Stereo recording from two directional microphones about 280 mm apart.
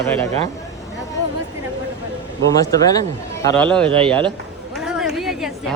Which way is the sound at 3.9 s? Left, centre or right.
Centre.